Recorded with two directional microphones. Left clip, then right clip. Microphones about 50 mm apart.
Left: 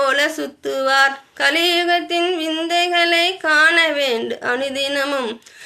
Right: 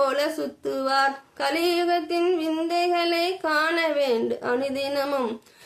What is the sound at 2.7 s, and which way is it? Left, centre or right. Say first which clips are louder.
A woman's voice: left 8 dB; centre.